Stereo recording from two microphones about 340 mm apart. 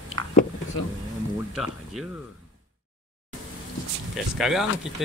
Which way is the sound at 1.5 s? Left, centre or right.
Centre.